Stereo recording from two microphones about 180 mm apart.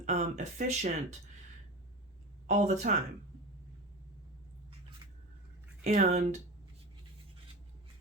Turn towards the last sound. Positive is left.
turn(degrees=-40)  # may be behind; listen again after turning